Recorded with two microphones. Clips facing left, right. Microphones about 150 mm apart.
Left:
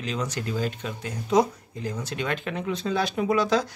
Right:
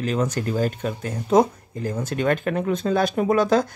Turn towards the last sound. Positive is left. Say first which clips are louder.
# right 4 dB
turn(degrees=-50)  # may be behind; listen again after turning